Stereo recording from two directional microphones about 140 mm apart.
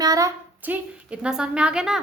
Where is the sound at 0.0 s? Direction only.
25° right (ahead or behind).